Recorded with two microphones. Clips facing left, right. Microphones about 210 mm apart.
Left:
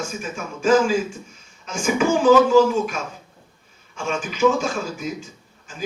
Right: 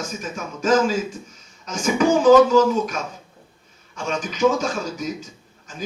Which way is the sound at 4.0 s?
40° right (ahead or behind).